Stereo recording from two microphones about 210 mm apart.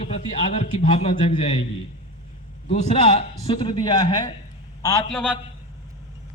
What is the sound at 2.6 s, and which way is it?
A man's voice, 30° left (ahead or behind).